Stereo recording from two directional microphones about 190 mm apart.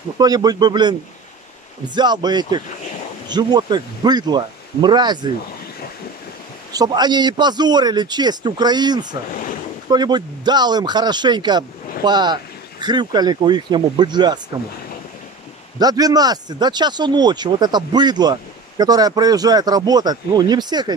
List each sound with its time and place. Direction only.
0.2 s a man's voice: 20° right (ahead or behind)
2.0 s a man's voice: 20° right (ahead or behind)
6.7 s a man's voice: 20° right (ahead or behind)
15.8 s a man's voice: 20° right (ahead or behind)